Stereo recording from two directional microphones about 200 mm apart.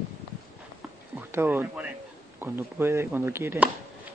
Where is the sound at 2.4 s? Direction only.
10° right (ahead or behind).